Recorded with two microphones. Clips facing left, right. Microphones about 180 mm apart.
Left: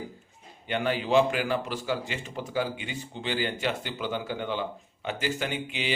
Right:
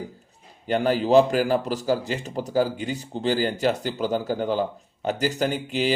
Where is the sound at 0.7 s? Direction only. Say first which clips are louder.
Right 6 dB; 40° right (ahead or behind).